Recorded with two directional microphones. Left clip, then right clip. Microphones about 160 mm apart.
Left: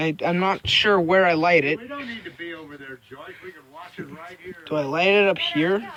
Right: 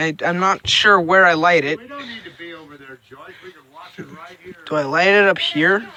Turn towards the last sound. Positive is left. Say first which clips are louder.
# right 6 dB
turn(degrees=-10)  # may be behind; listen again after turning